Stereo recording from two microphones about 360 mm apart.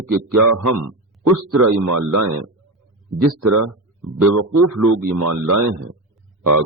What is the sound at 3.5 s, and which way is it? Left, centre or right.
A man's voice, right.